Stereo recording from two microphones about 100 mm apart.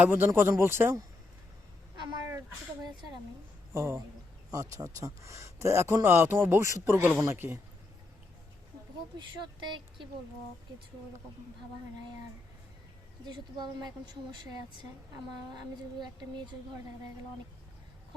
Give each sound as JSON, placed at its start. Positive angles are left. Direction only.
{"t": 0.0, "sound": "speech", "side_deg": -20}
{"t": 3.8, "sound": "a man's voice", "side_deg": -25}
{"t": 9.1, "sound": "a woman's voice", "side_deg": -50}
{"t": 13.2, "sound": "a woman's voice", "side_deg": -45}
{"t": 15.5, "sound": "a woman's voice", "side_deg": -50}